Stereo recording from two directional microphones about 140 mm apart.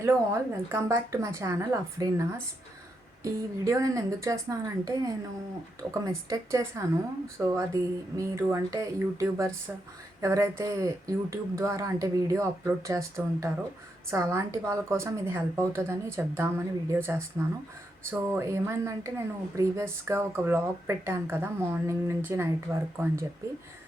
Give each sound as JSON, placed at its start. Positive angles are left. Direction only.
{"t": 0.0, "sound": "speech", "side_deg": -15}
{"t": 3.2, "sound": "speech", "side_deg": -25}